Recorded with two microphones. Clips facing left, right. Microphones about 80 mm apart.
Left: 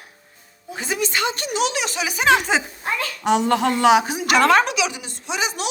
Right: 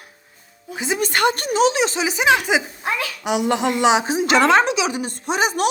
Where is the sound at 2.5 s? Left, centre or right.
Centre; by 4.9 s right.